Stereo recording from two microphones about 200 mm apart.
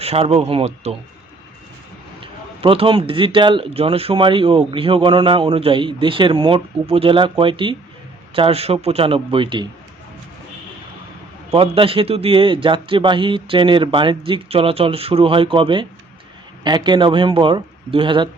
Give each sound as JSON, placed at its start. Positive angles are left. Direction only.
{"t": 0.0, "sound": "speech", "side_deg": -30}
{"t": 2.2, "sound": "speech", "side_deg": -25}
{"t": 11.5, "sound": "speech", "side_deg": -30}